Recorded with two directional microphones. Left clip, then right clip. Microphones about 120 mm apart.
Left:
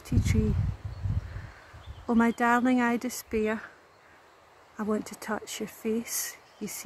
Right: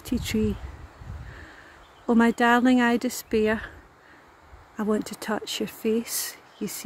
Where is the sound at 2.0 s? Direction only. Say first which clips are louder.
Right 4 dB; 30° right (ahead or behind).